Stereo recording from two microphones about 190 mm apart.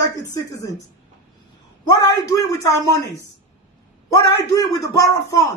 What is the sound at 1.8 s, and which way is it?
Speech, 20° left (ahead or behind).